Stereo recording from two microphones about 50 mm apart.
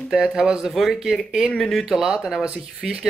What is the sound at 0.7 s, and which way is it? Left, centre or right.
Speech, centre.